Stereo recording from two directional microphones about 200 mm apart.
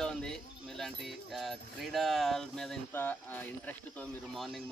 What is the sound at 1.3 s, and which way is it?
Speech, centre (ahead or behind).